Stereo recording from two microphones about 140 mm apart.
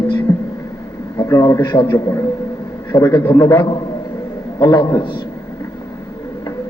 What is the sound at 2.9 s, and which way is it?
A man's voice, 30° left (ahead or behind).